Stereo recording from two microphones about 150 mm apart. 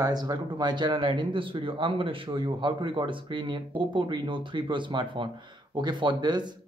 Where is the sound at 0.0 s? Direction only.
25° right (ahead or behind).